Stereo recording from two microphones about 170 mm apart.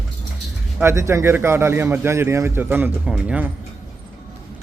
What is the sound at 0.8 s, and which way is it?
A man's voice, 15° right (ahead or behind).